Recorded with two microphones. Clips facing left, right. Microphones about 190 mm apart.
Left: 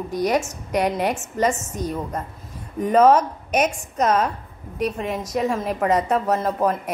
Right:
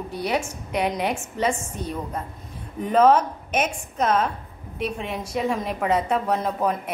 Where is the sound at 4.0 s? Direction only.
Centre (ahead or behind).